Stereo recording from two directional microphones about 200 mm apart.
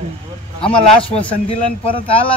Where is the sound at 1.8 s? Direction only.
25° left (ahead or behind).